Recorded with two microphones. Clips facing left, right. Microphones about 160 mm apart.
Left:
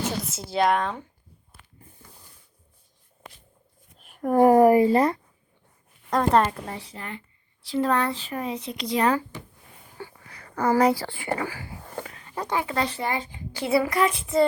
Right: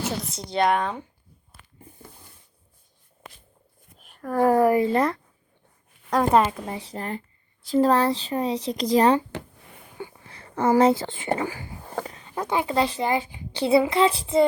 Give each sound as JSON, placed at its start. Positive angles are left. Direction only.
{"t": 0.3, "sound": "a woman's voice", "side_deg": 5}
{"t": 4.2, "sound": "a woman's voice", "side_deg": 20}
{"t": 6.9, "sound": "speech", "side_deg": -40}